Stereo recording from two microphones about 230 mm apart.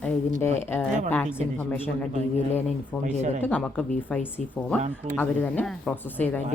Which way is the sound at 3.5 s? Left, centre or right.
Centre.